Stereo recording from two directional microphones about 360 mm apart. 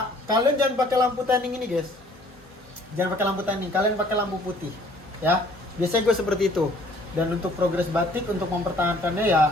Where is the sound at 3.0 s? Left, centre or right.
Centre.